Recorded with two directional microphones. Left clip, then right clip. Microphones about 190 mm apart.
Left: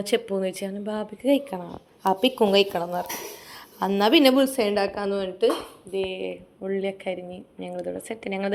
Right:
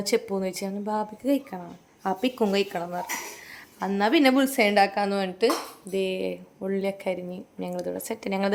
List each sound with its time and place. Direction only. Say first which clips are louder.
0.0 s a woman's voice: left 1 dB; 10° right (ahead or behind)
4.4 s a woman's voice: right 1 dB; 30° right (ahead or behind)
6.6 s a woman's voice: left 1 dB; 20° right (ahead or behind)